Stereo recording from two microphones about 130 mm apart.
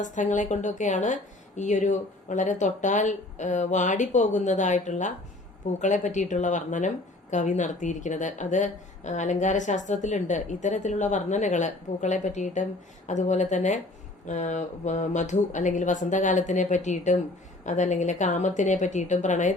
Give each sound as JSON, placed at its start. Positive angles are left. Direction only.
{"t": 0.0, "sound": "a woman's voice", "side_deg": 75}